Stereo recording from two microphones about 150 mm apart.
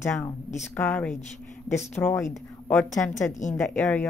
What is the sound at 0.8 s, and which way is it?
Speech, 5° left (ahead or behind).